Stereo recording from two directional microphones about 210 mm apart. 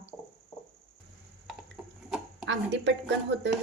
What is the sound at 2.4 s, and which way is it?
Speech, 55° right (ahead or behind).